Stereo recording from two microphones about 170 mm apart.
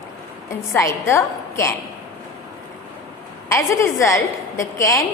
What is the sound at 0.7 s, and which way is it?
A woman's voice, 15° left (ahead or behind).